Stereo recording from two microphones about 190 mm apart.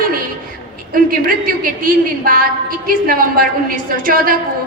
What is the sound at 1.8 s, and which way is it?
A woman's voice, 50° right (ahead or behind).